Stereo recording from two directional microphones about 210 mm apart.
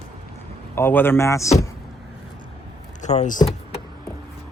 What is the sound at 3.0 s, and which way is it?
Speech, 35° left (ahead or behind).